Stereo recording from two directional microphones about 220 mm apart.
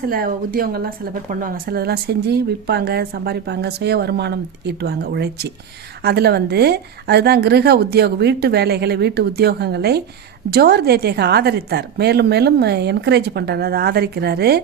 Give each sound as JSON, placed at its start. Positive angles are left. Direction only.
{"t": 0.1, "sound": "speech", "side_deg": -40}